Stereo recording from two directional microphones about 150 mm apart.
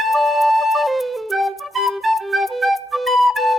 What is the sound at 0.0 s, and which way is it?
Flute, centre (ahead or behind).